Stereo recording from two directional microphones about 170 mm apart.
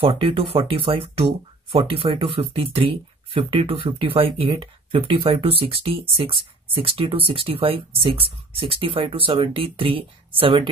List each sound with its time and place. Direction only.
0.0 s speech: 30° right (ahead or behind)